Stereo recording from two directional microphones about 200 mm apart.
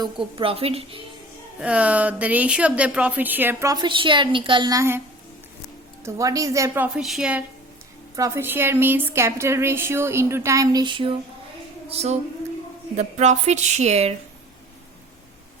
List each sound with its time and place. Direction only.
0.0 s a woman's voice: 25° right (ahead or behind)
1.6 s speech: 5° right (ahead or behind)
6.1 s speech: 15° right (ahead or behind); by 14.2 s 30° right (ahead or behind)